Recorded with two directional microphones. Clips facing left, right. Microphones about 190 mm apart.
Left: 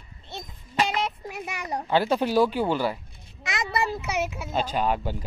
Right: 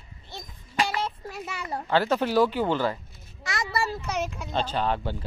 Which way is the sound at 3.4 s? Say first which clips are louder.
Left 2 dB; 20° left (ahead or behind).